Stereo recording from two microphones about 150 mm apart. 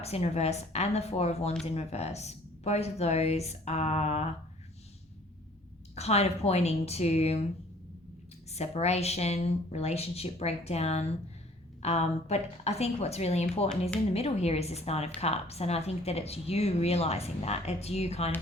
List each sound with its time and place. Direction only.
0.0 s speech: 45° left (ahead or behind)
5.9 s speech: 45° left (ahead or behind)
8.4 s speech: 45° left (ahead or behind)